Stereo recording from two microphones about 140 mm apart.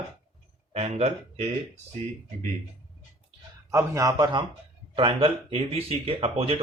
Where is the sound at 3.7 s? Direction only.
25° right (ahead or behind).